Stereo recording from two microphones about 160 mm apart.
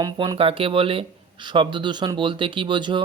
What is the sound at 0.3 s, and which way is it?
Speech, 35° right (ahead or behind).